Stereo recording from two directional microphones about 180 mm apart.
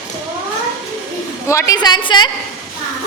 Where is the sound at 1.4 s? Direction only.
15° left (ahead or behind).